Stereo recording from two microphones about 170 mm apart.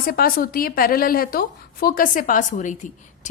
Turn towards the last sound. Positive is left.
turn(degrees=45)  # may be behind; listen again after turning